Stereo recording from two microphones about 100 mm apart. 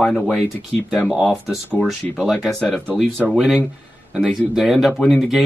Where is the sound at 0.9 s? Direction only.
Centre (ahead or behind).